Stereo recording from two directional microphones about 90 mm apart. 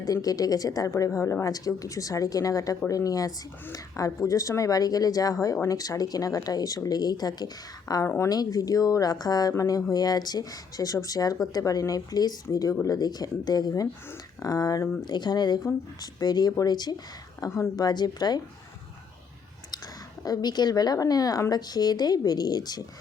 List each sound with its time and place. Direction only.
0.0 s a woman's voice: 45° left (ahead or behind)
8.0 s a woman's voice: 25° left (ahead or behind)
8.3 s a woman's voice: 45° left (ahead or behind)
15.0 s speech: 55° left (ahead or behind)
20.2 s speech: 50° left (ahead or behind)